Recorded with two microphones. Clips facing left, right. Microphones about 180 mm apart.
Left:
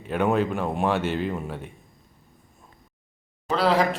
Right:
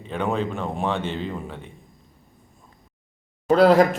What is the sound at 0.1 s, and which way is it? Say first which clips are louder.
A man's voice: left 3 dB; 10° left (ahead or behind).